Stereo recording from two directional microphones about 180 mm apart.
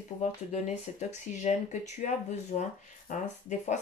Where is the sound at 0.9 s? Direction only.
40° left (ahead or behind).